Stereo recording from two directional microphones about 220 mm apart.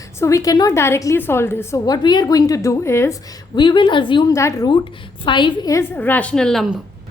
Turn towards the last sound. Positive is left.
turn(degrees=0)  # may be behind; listen again after turning